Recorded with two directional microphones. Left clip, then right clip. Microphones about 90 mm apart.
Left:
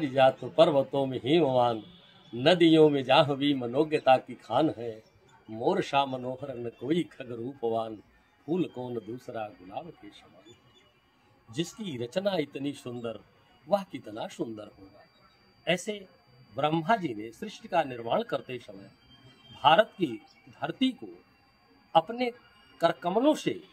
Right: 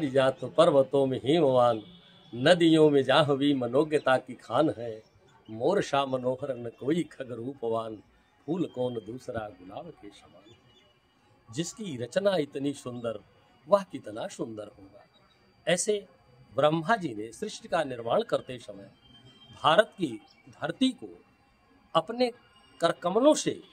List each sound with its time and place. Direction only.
0.0 s speech: 35° right (ahead or behind)
4.7 s a man's voice: 15° right (ahead or behind)
5.5 s speech: 35° right (ahead or behind)
11.6 s speech: 35° right (ahead or behind)
21.9 s speech: 40° right (ahead or behind)